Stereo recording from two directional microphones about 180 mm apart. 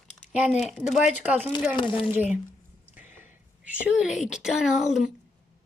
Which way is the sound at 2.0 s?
10° right (ahead or behind).